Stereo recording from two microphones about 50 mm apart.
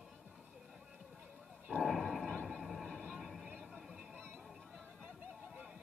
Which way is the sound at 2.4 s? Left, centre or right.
Centre.